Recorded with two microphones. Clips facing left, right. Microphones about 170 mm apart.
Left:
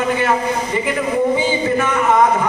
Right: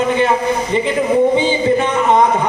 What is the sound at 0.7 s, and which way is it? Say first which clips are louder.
A man's voice: right 5 dB; 25° right (ahead or behind).